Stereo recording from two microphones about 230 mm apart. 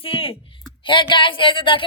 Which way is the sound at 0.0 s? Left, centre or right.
Left.